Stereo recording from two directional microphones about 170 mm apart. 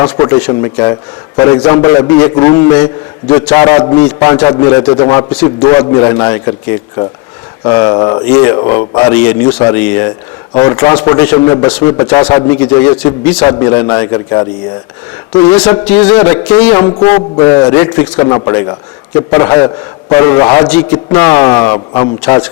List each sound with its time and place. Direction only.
0.0 s a man's voice: 20° left (ahead or behind)
8.5 s a man's voice: 30° left (ahead or behind)
9.1 s a man's voice: 10° left (ahead or behind); by 15.8 s 25° left (ahead or behind)
16.8 s a man's voice: 20° left (ahead or behind)